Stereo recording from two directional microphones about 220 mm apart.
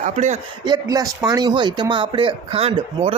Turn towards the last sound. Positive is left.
turn(degrees=-25)  # may be behind; listen again after turning